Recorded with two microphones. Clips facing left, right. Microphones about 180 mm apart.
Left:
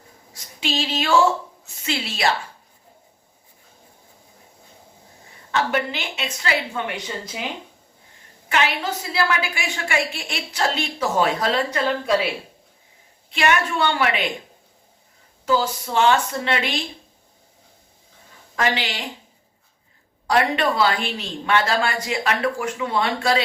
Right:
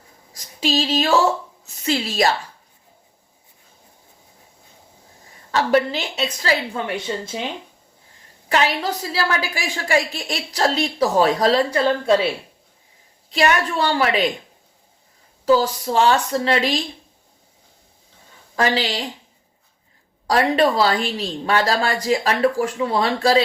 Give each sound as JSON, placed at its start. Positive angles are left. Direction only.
{"t": 0.6, "sound": "a woman's voice", "side_deg": -40}
{"t": 5.5, "sound": "a woman's voice", "side_deg": -35}
{"t": 8.4, "sound": "a woman's voice", "side_deg": -35}
{"t": 13.3, "sound": "a woman's voice", "side_deg": -35}
{"t": 15.4, "sound": "a woman's voice", "side_deg": -35}
{"t": 18.5, "sound": "a woman's voice", "side_deg": -35}
{"t": 20.2, "sound": "a woman's voice", "side_deg": -35}